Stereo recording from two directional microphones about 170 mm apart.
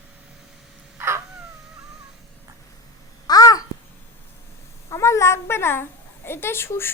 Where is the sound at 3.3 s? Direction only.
20° left (ahead or behind).